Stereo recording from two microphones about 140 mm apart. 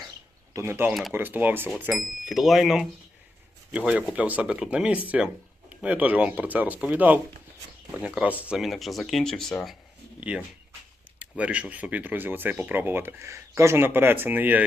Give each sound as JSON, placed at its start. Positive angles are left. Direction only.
{"t": 0.5, "sound": "speech", "side_deg": -20}
{"t": 1.9, "sound": "speech", "side_deg": 0}
{"t": 10.2, "sound": "speech", "side_deg": -10}